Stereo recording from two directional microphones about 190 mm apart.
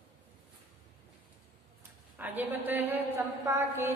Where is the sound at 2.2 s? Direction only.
10° right (ahead or behind).